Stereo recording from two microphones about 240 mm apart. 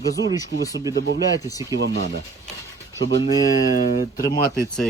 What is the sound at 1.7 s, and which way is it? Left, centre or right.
Speech, right.